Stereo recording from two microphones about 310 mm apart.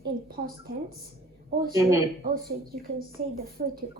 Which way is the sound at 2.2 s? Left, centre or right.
Right.